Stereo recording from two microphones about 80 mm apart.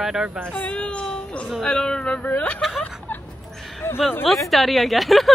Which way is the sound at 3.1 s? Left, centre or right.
Left.